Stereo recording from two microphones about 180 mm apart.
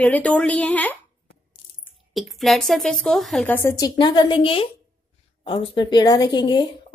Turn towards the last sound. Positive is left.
turn(degrees=25)  # may be behind; listen again after turning